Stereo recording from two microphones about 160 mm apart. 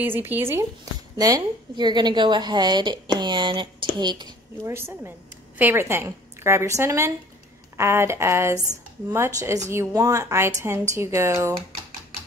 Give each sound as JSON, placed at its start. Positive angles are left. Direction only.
{"t": 0.0, "sound": "a woman's voice", "side_deg": -10}
{"t": 4.7, "sound": "a woman's voice", "side_deg": -15}